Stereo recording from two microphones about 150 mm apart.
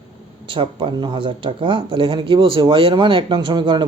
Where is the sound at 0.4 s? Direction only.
35° right (ahead or behind).